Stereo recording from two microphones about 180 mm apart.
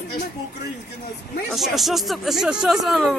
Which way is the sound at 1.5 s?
Centre (ahead or behind).